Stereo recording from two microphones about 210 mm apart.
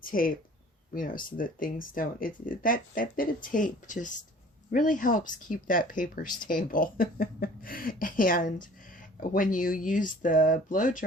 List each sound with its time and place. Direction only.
0.0 s speech: 40° left (ahead or behind)